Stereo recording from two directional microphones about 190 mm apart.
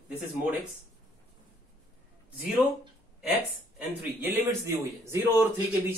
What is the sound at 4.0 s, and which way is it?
A man's voice, 10° right (ahead or behind).